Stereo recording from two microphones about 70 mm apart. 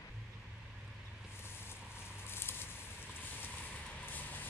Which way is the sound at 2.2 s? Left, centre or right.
Left.